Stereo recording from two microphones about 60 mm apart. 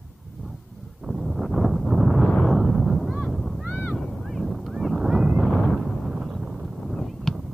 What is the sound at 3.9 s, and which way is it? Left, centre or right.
Fowl, centre.